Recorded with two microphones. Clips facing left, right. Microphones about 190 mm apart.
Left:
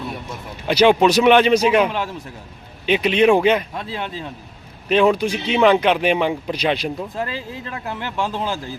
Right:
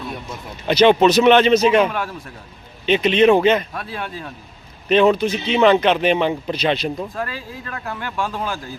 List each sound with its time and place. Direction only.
0.7 s speech: 10° left (ahead or behind)
1.9 s speech: 20° left (ahead or behind)
2.8 s speech: 10° left (ahead or behind)
3.8 s speech: 20° left (ahead or behind)
4.9 s speech: 10° left (ahead or behind)
7.1 s speech: 20° left (ahead or behind)